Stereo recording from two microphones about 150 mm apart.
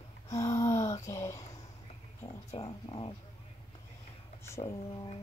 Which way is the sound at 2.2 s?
30° left (ahead or behind).